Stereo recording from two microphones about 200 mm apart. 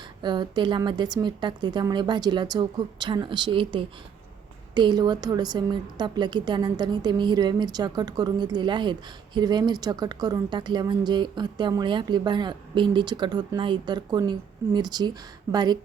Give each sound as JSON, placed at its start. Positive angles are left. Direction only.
{"t": 0.2, "sound": "a woman's voice", "side_deg": -20}